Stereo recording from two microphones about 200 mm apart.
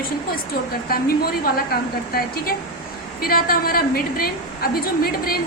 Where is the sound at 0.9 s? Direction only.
50° left (ahead or behind).